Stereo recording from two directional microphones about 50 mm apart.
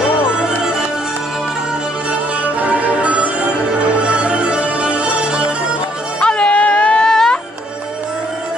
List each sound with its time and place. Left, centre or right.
0.2 s music: centre
2.6 s music: right
6.2 s a sound: left
7.1 s music: centre